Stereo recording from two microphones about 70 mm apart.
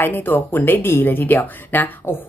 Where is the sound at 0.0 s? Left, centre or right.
Left.